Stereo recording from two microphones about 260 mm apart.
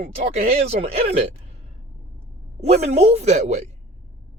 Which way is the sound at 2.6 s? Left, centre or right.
Right.